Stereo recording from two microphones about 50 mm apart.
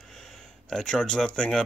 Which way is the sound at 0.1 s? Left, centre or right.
Centre.